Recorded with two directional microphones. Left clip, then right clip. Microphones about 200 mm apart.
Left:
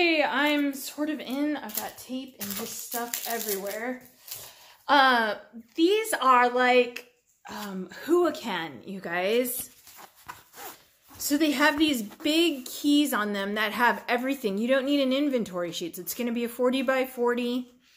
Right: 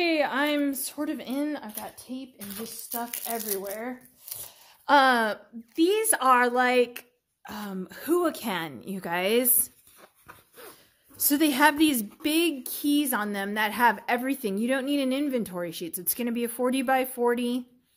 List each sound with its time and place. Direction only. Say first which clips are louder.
0.0 s speech: left 1 dB; 50° right (ahead or behind)
3.3 s a woman's voice: even; 55° right (ahead or behind)
11.1 s speech: right 1 dB; 45° right (ahead or behind)